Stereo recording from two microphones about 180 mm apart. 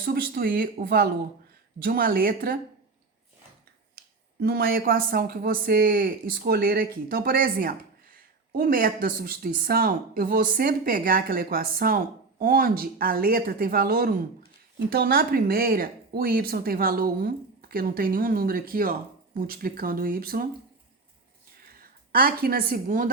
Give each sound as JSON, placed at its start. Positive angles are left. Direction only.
{"t": 0.0, "sound": "speech", "side_deg": -55}
{"t": 4.0, "sound": "a sound", "side_deg": -55}
{"t": 4.4, "sound": "speech", "side_deg": -60}
{"t": 21.8, "sound": "a woman's voice", "side_deg": -55}